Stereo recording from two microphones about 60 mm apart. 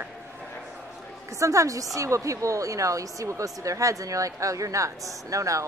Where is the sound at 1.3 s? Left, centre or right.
Right.